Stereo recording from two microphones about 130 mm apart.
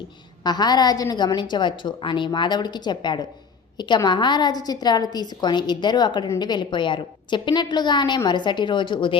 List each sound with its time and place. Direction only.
0.4 s a woman's voice: 35° left (ahead or behind)
6.2 s a woman's voice: 20° left (ahead or behind)
6.5 s a woman's voice: 35° left (ahead or behind)